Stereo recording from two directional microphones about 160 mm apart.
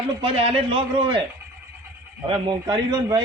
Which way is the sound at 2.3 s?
25° right (ahead or behind).